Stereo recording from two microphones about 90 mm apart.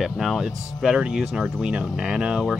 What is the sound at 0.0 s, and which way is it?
Speech, centre (ahead or behind).